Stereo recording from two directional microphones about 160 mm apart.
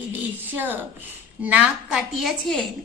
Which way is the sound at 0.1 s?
10° right (ahead or behind).